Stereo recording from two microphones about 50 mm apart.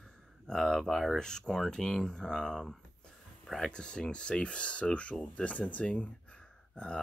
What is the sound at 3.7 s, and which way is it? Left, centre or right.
Speech, centre.